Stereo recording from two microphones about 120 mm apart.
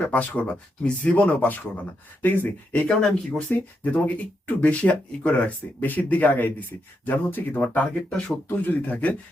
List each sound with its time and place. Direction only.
0.0 s a man's voice: 10° left (ahead or behind)